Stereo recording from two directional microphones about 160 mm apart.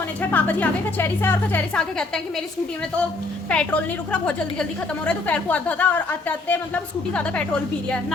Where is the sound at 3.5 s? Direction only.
5° left (ahead or behind).